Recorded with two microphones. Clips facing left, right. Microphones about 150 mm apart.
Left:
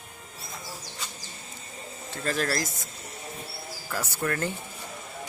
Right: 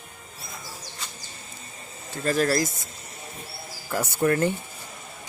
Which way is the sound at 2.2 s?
5° right (ahead or behind).